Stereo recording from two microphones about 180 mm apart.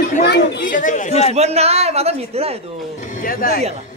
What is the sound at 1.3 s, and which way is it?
A man's voice, 35° right (ahead or behind).